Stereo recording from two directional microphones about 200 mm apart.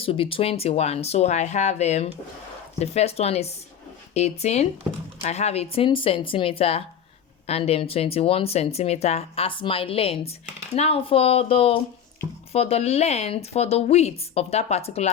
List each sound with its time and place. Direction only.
0.0 s speech: 25° left (ahead or behind)